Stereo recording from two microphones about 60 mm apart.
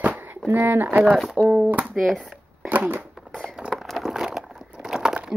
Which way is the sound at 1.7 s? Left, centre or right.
Right.